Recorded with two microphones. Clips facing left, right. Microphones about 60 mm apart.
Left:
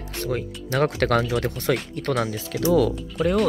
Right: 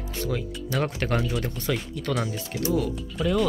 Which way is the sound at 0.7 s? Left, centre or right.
Left.